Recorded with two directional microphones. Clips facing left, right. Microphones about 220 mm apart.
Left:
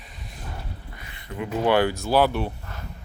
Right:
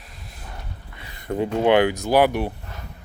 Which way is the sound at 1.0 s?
35° right (ahead or behind).